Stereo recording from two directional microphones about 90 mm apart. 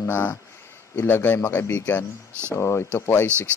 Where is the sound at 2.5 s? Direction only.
30° left (ahead or behind).